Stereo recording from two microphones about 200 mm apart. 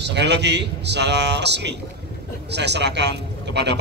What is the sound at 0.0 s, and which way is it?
A man's voice, 60° right (ahead or behind).